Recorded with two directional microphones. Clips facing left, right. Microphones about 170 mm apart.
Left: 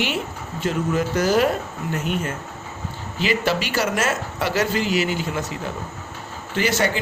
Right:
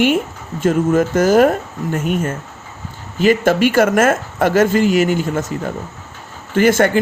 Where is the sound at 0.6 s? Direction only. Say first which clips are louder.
Right 8 dB; 45° right (ahead or behind).